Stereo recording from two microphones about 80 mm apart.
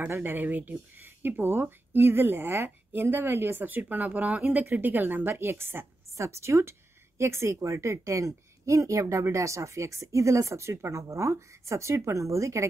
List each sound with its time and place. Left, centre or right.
0.1 s speech: right